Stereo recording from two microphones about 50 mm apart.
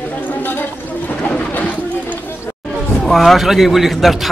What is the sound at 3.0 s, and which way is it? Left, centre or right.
Speech, centre.